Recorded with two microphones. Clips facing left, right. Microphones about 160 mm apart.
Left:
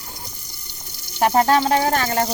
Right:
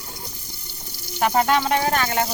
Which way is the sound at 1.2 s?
35° left (ahead or behind).